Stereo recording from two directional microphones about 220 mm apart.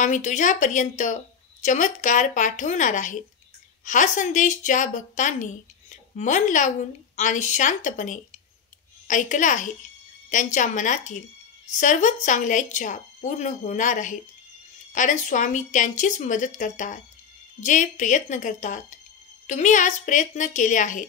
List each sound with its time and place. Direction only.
0.0 s a woman's voice: 35° left (ahead or behind)